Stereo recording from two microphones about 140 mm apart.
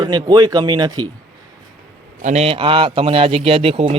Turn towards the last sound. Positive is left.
turn(degrees=-45)  # may be behind; listen again after turning